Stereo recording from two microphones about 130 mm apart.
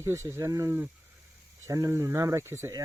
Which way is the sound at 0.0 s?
20° right (ahead or behind).